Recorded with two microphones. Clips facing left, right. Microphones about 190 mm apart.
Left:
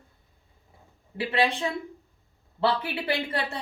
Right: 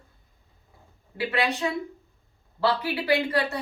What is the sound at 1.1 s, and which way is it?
A woman's voice, 25° left (ahead or behind).